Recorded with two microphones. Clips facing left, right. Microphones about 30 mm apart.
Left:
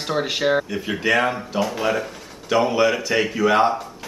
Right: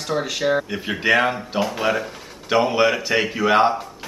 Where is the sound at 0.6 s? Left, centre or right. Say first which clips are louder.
Right 1 dB; centre.